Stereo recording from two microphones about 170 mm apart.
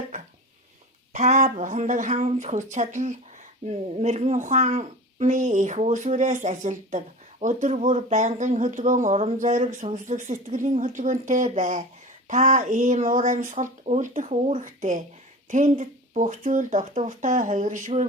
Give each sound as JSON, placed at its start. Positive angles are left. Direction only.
{"t": 1.1, "sound": "speech", "side_deg": -45}